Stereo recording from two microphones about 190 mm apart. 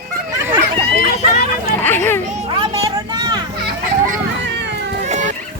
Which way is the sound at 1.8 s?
10° left (ahead or behind).